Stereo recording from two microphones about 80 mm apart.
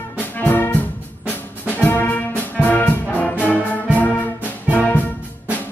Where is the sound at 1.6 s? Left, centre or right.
Left.